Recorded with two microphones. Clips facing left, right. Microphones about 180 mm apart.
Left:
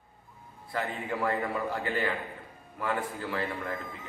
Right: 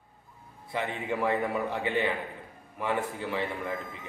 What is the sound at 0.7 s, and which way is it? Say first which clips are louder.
A man's voice: right 1 dB; 15° right (ahead or behind).